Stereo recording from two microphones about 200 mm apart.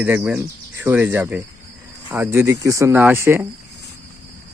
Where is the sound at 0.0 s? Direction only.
5° right (ahead or behind).